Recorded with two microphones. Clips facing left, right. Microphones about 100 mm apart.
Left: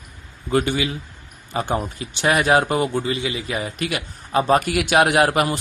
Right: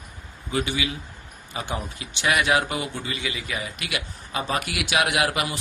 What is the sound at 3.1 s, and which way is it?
Speech, 30° left (ahead or behind).